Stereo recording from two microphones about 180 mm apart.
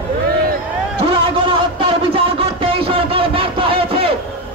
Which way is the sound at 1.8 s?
30° right (ahead or behind).